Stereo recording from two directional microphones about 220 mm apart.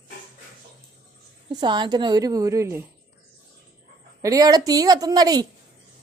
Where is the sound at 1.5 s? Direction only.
20° right (ahead or behind).